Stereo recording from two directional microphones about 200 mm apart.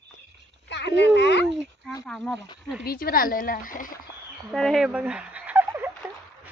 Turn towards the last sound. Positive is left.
turn(degrees=-10)  # may be behind; listen again after turning